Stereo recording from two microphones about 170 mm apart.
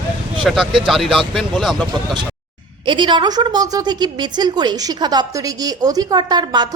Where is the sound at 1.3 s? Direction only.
Centre (ahead or behind).